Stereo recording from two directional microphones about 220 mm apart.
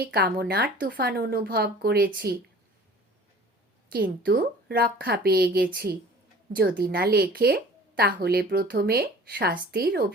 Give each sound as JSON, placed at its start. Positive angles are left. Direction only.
{"t": 0.0, "sound": "a woman's voice", "side_deg": -45}
{"t": 3.8, "sound": "a woman's voice", "side_deg": -40}